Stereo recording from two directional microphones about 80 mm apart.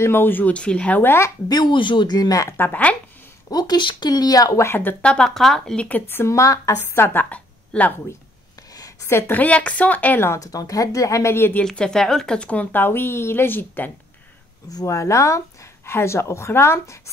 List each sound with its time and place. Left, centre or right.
0.0 s speech: left
1.5 s speech: left
2.5 s speech: left
3.4 s speech: left
4.6 s speech: left
5.0 s speech: centre
5.9 s a woman's voice: left
7.2 s a sound: centre
9.0 s speech: left
10.4 s speech: left
11.3 s speech: left
11.6 s speech: centre; by 13.9 s left
14.9 s a woman's voice: left